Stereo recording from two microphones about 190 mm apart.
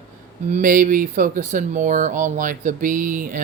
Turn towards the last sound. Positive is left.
turn(degrees=-45)  # may be behind; listen again after turning